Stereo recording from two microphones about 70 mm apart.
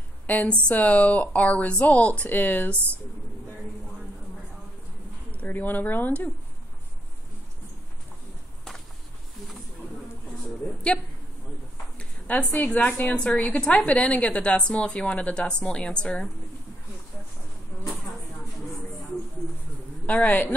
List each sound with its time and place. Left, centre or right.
0.3 s speech: centre
5.3 s speech: left
12.0 s a sound: centre
12.5 s a woman's voice: centre
20.1 s speech: left